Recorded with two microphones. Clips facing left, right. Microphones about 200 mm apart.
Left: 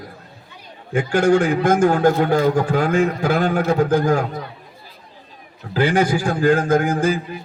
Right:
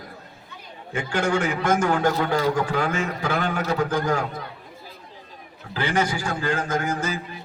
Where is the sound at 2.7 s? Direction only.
55° left (ahead or behind).